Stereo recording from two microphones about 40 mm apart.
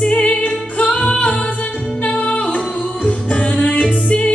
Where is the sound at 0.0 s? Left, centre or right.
Left.